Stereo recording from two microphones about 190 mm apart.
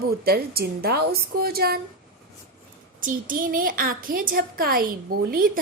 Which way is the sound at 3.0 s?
45° right (ahead or behind).